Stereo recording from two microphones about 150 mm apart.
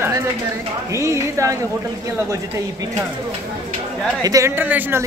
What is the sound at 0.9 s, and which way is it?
Speech, 20° right (ahead or behind).